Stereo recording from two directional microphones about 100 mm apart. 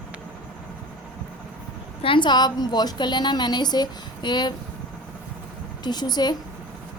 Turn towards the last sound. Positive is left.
turn(degrees=45)  # may be behind; listen again after turning